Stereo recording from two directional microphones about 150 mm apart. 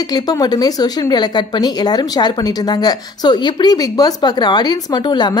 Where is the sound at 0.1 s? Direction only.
25° left (ahead or behind).